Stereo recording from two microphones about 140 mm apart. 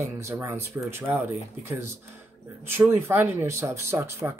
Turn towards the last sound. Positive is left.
turn(degrees=-20)  # may be behind; listen again after turning